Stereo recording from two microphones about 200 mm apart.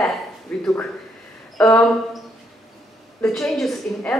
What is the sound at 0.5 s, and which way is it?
A woman's voice, 5° left (ahead or behind).